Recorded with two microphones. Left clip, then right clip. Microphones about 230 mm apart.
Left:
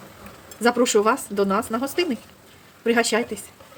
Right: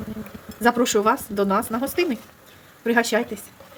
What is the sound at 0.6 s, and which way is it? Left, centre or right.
A woman's voice, centre.